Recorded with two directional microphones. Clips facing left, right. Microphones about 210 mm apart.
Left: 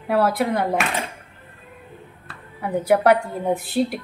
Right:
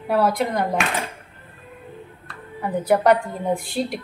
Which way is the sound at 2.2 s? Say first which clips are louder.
Right 1 dB; 10° left (ahead or behind).